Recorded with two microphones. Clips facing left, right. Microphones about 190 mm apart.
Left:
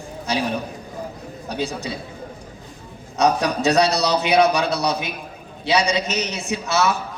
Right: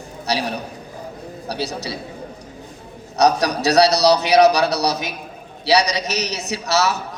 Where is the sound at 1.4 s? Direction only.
40° right (ahead or behind).